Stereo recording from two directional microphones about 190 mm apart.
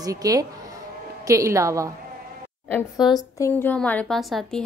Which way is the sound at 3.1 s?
15° left (ahead or behind).